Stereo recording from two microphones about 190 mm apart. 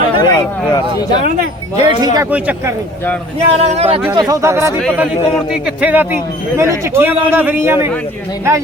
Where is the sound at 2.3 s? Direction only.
5° right (ahead or behind).